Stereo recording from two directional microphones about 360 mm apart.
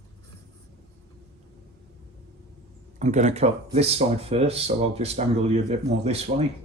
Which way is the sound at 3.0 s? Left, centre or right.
Centre.